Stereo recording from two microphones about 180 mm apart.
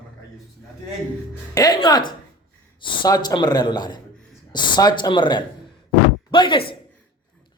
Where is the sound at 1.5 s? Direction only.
20° left (ahead or behind).